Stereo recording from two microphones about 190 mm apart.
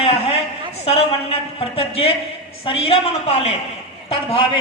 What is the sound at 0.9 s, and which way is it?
A woman's voice, 30° left (ahead or behind).